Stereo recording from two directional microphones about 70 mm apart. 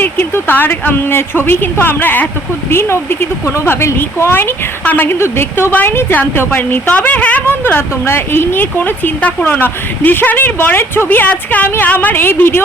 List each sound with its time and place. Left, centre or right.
0.0 s speech: left
7.6 s speech: left